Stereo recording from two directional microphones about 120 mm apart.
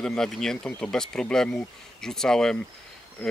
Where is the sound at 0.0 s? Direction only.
5° left (ahead or behind).